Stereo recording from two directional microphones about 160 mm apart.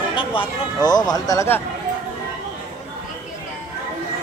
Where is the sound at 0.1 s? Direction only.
35° left (ahead or behind).